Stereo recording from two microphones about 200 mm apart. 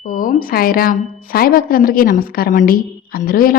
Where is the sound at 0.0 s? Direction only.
40° left (ahead or behind).